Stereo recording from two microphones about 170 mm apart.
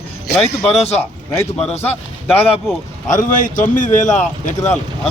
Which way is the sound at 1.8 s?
10° left (ahead or behind).